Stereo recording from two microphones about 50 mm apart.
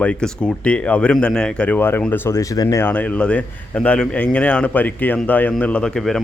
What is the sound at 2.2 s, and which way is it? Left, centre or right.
Speech, left.